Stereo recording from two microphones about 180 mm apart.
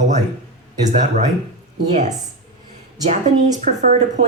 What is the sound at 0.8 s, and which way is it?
Speech, 40° right (ahead or behind).